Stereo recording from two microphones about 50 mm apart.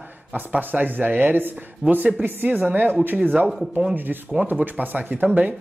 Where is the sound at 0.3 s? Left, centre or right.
Right.